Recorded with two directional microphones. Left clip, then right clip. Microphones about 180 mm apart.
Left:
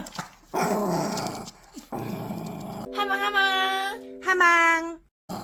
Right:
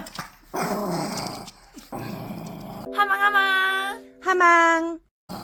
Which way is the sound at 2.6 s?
5° left (ahead or behind).